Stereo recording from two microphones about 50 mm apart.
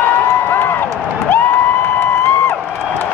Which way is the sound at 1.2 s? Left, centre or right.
Left.